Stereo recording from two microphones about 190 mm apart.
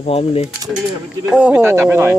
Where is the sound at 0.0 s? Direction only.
30° left (ahead or behind).